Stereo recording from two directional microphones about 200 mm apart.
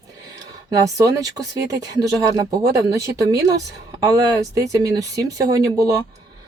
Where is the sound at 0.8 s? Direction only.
15° right (ahead or behind).